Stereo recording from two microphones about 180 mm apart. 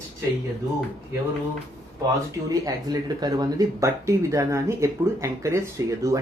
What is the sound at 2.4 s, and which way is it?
Speech, 20° right (ahead or behind).